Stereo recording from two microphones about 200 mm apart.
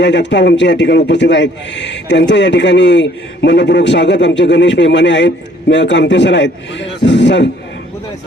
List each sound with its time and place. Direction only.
0.0 s a man's voice: 60° left (ahead or behind)